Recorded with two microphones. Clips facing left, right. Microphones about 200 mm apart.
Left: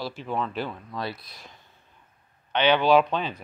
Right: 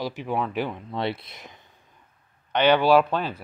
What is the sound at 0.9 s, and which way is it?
Speech, 25° right (ahead or behind).